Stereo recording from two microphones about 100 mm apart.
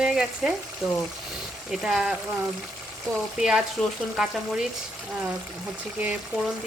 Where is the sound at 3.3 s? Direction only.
5° right (ahead or behind).